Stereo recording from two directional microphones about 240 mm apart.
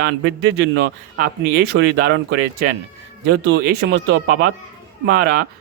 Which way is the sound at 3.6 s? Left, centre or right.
Right.